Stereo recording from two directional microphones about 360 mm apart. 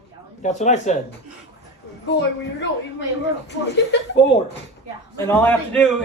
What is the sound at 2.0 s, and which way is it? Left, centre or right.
Speech, left.